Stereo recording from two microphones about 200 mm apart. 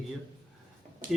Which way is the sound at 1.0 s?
40° right (ahead or behind).